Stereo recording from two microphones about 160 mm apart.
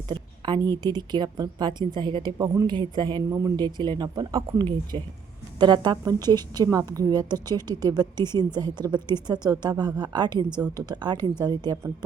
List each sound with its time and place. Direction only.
0.1 s a woman's voice: 30° right (ahead or behind)